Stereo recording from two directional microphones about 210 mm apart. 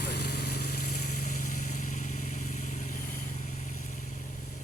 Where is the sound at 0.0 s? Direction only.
50° left (ahead or behind).